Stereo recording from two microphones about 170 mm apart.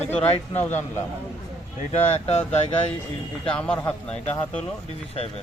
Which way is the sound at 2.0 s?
40° left (ahead or behind).